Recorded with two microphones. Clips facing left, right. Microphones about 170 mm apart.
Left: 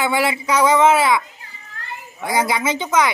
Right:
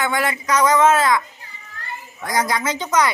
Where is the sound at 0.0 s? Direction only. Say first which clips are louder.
Left 2 dB; 10° left (ahead or behind).